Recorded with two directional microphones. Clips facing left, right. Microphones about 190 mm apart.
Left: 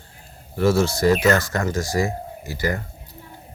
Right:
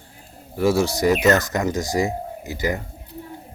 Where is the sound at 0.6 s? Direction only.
15° right (ahead or behind).